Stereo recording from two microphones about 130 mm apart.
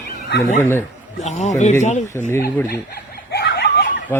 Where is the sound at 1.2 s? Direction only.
60° left (ahead or behind).